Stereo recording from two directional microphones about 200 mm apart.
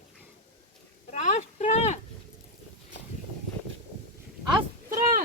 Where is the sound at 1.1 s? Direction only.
35° left (ahead or behind).